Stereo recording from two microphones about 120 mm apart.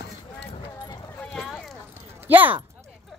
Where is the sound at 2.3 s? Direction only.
15° right (ahead or behind).